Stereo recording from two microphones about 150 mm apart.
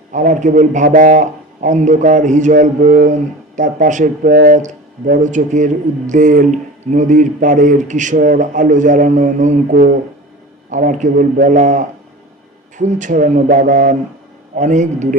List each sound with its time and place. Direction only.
0.1 s a man's voice: 55° right (ahead or behind)